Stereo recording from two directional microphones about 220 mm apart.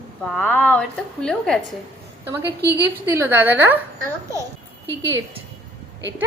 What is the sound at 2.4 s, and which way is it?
Speech, 50° right (ahead or behind).